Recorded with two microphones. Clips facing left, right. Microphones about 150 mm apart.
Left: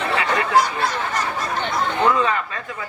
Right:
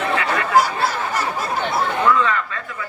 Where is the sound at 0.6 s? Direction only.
10° right (ahead or behind).